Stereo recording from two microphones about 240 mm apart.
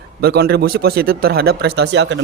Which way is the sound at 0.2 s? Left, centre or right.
Right.